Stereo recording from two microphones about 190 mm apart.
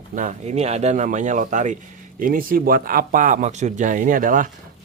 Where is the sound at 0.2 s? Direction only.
35° right (ahead or behind).